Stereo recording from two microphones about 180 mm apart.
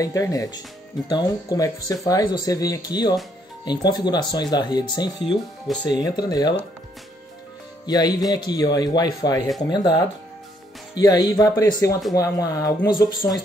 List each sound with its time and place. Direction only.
0.0 s speech: 20° left (ahead or behind)
7.8 s speech: 20° left (ahead or behind)